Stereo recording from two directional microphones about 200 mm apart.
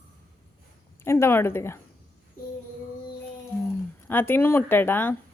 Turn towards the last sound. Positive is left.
turn(degrees=10)  # may be behind; listen again after turning